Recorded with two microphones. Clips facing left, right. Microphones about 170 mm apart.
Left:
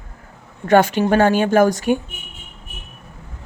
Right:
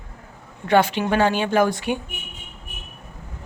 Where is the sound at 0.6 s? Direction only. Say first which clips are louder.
Left 4 dB; 45° left (ahead or behind).